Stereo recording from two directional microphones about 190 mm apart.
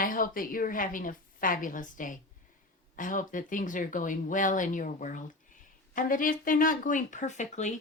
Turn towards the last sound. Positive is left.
turn(degrees=40)  # may be behind; listen again after turning